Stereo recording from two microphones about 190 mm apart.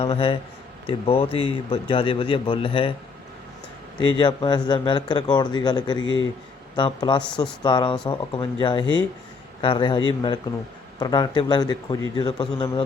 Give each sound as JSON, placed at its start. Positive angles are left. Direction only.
{"t": 0.0, "sound": "speech", "side_deg": 30}
{"t": 4.0, "sound": "speech", "side_deg": 25}
{"t": 6.0, "sound": "a man's voice", "side_deg": 90}
{"t": 6.7, "sound": "speech", "side_deg": 25}